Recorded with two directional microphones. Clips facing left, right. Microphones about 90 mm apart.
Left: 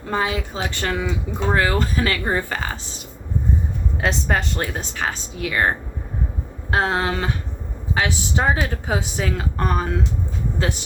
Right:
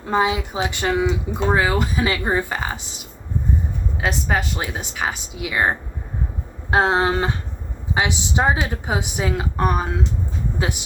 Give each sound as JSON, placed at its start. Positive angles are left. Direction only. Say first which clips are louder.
{"t": 0.0, "sound": "speech", "louder": "right 3 dB", "side_deg": -15}
{"t": 4.0, "sound": "speech", "louder": "even", "side_deg": -5}